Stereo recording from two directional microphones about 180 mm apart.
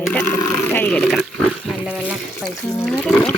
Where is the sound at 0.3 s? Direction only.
10° left (ahead or behind).